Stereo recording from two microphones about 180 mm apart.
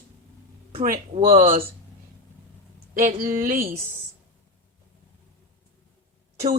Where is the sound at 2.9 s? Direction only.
50° right (ahead or behind).